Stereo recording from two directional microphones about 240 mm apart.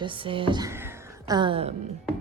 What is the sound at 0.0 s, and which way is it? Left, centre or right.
A woman's voice, right.